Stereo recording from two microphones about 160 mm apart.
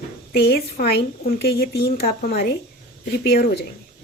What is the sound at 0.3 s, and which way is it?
A woman's voice, 75° left (ahead or behind).